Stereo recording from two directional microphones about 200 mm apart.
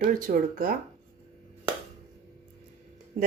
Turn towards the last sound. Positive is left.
turn(degrees=-40)  # may be behind; listen again after turning